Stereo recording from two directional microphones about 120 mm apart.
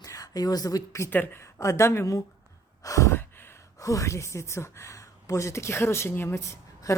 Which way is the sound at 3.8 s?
25° left (ahead or behind).